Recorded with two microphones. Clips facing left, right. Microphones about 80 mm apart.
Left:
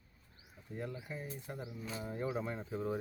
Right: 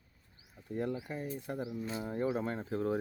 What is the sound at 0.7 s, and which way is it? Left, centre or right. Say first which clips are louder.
Speech: right 7 dB; right.